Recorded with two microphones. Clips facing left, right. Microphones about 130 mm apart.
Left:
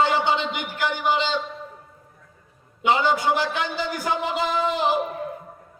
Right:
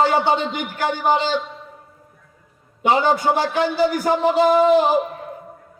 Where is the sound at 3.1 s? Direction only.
40° right (ahead or behind).